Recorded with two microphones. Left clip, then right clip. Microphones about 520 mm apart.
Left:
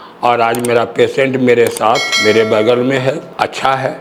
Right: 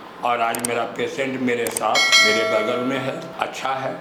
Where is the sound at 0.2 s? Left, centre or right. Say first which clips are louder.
Left 9 dB; left.